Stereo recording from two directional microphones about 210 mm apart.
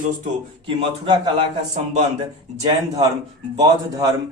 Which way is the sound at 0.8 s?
20° right (ahead or behind).